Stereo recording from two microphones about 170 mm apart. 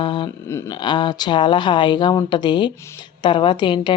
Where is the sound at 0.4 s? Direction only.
15° left (ahead or behind).